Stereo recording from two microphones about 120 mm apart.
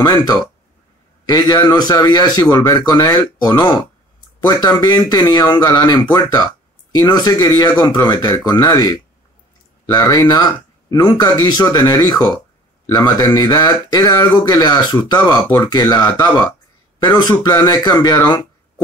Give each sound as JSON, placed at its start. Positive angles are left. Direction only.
{"t": 0.0, "sound": "speech", "side_deg": 35}